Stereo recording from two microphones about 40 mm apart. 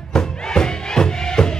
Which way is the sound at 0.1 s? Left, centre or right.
Centre.